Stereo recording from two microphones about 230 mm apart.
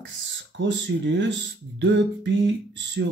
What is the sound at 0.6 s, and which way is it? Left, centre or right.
Speech, right.